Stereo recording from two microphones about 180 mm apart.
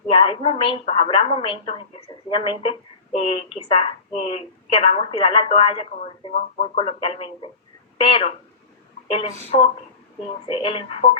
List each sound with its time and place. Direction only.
0.1 s a woman's voice: 30° left (ahead or behind)
10.2 s a woman's voice: 30° left (ahead or behind)